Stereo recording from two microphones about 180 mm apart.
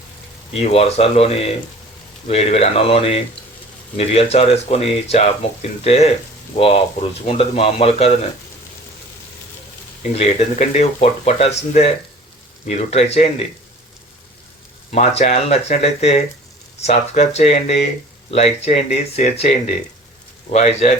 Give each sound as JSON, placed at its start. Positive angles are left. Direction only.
{"t": 0.5, "sound": "speech", "side_deg": 35}
{"t": 10.2, "sound": "speech", "side_deg": 35}
{"t": 14.9, "sound": "speech", "side_deg": 35}